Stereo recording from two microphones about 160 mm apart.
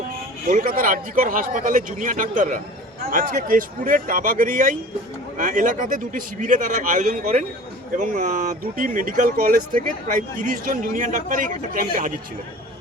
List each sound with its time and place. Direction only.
0.4 s speech: 60° right (ahead or behind)